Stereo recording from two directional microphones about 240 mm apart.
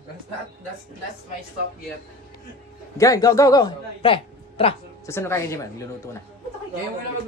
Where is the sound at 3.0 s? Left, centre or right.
Centre.